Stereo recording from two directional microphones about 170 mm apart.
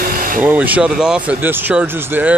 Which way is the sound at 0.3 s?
10° right (ahead or behind).